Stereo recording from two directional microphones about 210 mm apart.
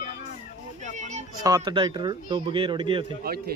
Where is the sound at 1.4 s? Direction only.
15° right (ahead or behind).